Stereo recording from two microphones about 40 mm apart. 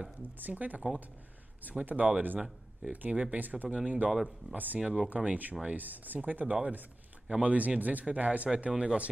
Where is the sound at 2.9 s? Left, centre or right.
Right.